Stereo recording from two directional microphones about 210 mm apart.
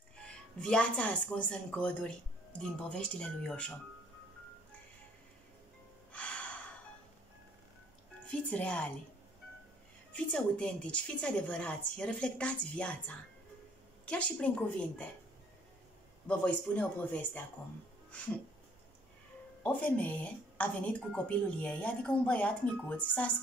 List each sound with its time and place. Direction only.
0.6 s a woman's voice: 5° left (ahead or behind)
6.1 s gasp: 5° left (ahead or behind)
8.3 s a woman's voice: 5° left (ahead or behind)
10.3 s a woman's voice: 5° left (ahead or behind)
16.3 s speech: 5° left (ahead or behind)
19.6 s speech: 5° left (ahead or behind)